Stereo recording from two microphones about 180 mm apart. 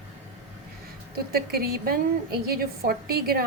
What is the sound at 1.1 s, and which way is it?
A woman's voice, 60° right (ahead or behind).